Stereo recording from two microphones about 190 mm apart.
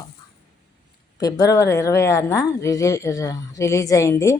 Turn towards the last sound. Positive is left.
turn(degrees=15)  # may be behind; listen again after turning